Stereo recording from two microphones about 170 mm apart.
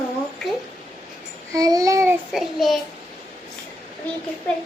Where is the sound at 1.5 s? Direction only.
20° right (ahead or behind).